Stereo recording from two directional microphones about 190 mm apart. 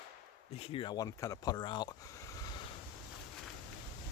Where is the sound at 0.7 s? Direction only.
20° left (ahead or behind).